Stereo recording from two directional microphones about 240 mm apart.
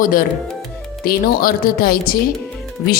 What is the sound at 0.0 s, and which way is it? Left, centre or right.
A woman's voice, left.